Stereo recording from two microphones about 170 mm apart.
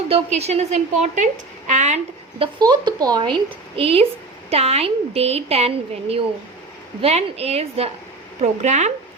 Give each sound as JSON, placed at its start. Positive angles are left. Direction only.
{"t": 0.1, "sound": "a woman's voice", "side_deg": -40}
{"t": 2.4, "sound": "a woman's voice", "side_deg": -25}